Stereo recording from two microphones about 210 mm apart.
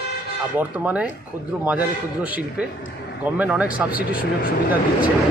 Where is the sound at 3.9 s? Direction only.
45° left (ahead or behind).